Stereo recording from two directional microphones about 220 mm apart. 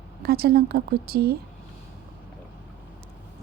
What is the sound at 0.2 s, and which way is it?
A woman's voice, 45° right (ahead or behind).